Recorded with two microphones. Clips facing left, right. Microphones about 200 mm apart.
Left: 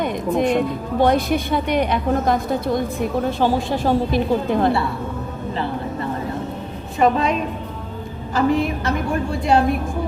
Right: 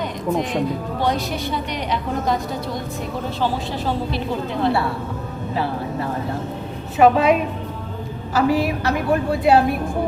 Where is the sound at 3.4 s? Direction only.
50° left (ahead or behind).